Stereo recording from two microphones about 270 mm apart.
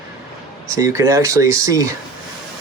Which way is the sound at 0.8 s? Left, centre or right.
Centre.